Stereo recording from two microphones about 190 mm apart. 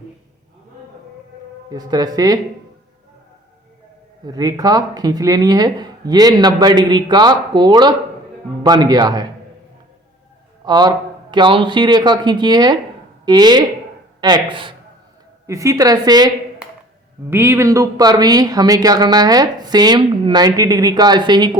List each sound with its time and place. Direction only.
1.7 s speech: 20° right (ahead or behind)
4.3 s speech: 20° right (ahead or behind)
10.7 s speech: 20° right (ahead or behind)